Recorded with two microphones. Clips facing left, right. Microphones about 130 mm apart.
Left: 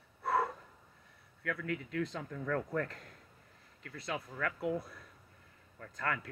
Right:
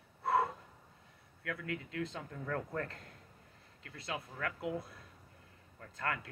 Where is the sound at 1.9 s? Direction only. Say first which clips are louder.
Left 3 dB; 30° right (ahead or behind).